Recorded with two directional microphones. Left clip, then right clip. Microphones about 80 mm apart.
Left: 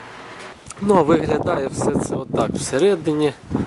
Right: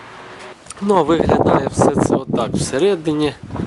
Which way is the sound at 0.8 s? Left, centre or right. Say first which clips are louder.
Right 2 dB; centre.